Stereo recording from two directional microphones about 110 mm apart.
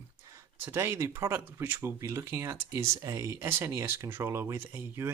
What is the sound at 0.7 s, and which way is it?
Speech, 20° right (ahead or behind).